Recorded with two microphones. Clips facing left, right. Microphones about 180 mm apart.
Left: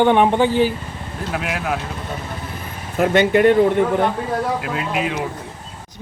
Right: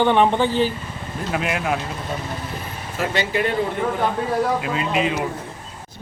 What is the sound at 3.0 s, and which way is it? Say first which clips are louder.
Speech: left 8 dB; 55° left (ahead or behind).